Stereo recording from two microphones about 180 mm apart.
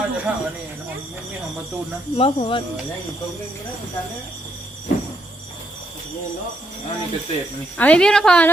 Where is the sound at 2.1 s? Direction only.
30° left (ahead or behind).